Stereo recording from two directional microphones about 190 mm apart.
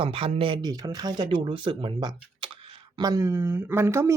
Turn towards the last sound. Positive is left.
turn(degrees=-15)  # may be behind; listen again after turning